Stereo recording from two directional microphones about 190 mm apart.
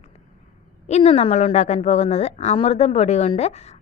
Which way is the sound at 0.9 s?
35° left (ahead or behind).